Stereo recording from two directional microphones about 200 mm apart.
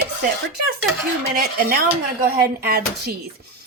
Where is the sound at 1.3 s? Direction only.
45° right (ahead or behind).